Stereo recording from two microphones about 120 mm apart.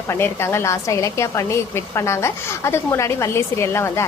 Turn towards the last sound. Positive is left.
turn(degrees=20)  # may be behind; listen again after turning